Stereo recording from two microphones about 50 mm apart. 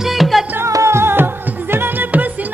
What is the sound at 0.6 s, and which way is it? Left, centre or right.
Music, right.